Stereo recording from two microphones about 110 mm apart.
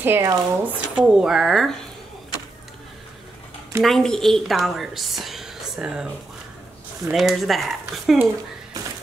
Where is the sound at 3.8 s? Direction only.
5° left (ahead or behind).